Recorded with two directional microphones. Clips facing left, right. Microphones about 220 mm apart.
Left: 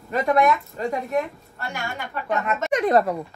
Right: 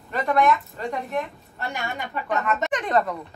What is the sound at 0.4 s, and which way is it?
A woman's voice, centre (ahead or behind).